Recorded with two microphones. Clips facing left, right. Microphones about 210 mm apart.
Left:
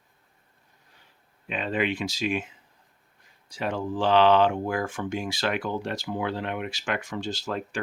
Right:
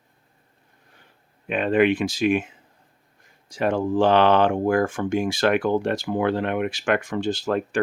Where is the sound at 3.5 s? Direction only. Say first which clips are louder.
Right 8 dB; 50° right (ahead or behind).